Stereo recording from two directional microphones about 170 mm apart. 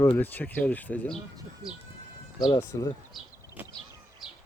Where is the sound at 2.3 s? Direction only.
20° left (ahead or behind).